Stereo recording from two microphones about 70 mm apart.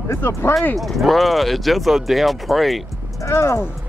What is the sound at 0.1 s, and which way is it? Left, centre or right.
Speech, left.